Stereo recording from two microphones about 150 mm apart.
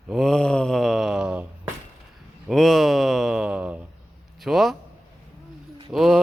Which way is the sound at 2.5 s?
Centre (ahead or behind).